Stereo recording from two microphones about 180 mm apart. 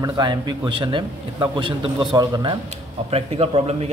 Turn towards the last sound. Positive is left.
turn(degrees=-35)  # may be behind; listen again after turning